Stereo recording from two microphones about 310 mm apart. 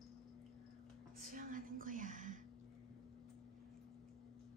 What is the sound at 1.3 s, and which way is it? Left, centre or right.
Whispering, right.